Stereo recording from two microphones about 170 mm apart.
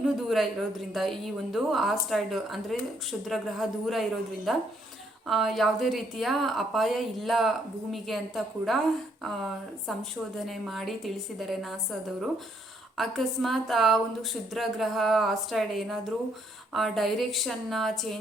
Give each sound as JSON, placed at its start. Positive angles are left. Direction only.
{"t": 0.0, "sound": "a woman's voice", "side_deg": 0}